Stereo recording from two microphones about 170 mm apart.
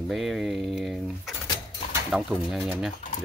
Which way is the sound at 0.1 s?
Centre (ahead or behind).